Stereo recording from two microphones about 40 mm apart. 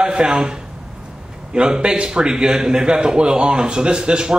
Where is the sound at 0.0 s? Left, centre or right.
Right.